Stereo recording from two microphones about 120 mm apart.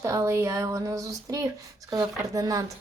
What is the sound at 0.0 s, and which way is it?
A woman's voice, 25° right (ahead or behind).